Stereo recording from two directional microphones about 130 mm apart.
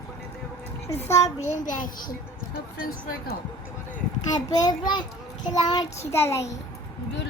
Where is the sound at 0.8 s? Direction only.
20° left (ahead or behind).